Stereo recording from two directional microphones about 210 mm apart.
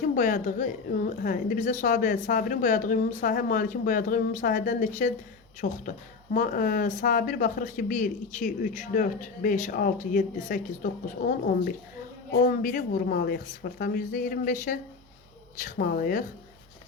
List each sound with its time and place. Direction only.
0.0 s a woman's voice: 40° left (ahead or behind)